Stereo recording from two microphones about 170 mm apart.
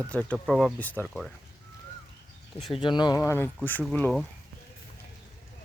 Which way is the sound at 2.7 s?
25° left (ahead or behind).